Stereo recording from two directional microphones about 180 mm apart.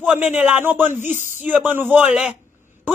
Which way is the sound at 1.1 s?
40° left (ahead or behind).